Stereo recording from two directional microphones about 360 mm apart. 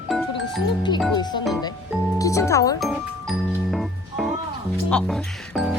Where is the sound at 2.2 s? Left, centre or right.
Centre.